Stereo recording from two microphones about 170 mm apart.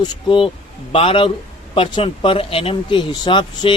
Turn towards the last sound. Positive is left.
turn(degrees=30)  # may be behind; listen again after turning